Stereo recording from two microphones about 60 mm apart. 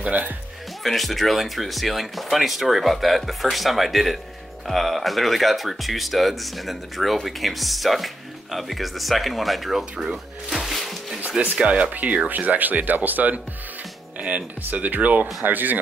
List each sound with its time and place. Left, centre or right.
0.8 s speech: centre
11.1 s speech: right